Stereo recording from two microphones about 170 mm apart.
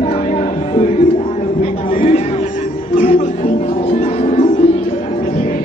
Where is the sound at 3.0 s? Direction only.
55° left (ahead or behind).